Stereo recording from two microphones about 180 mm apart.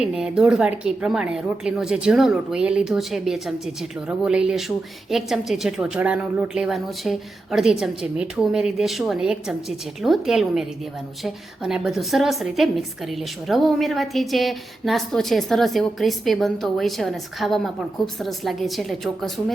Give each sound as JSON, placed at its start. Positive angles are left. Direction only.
{"t": 0.0, "sound": "a woman's voice", "side_deg": -5}